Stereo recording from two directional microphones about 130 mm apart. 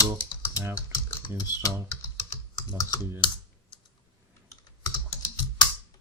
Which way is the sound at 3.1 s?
40° left (ahead or behind).